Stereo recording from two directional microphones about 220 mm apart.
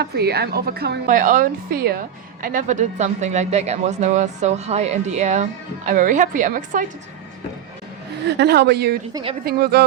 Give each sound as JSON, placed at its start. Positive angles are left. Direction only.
{"t": 0.0, "sound": "a woman's voice", "side_deg": -45}
{"t": 8.3, "sound": "a woman's voice", "side_deg": -50}